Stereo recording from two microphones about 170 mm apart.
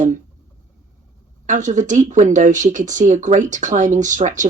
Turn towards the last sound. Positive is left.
turn(degrees=-45)  # may be behind; listen again after turning